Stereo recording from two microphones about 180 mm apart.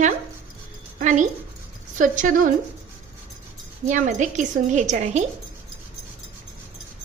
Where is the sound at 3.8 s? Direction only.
45° right (ahead or behind).